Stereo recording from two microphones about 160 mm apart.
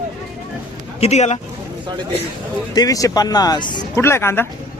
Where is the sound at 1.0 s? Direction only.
45° left (ahead or behind).